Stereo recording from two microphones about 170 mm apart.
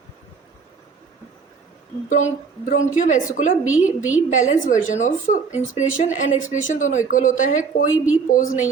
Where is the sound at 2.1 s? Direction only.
45° left (ahead or behind).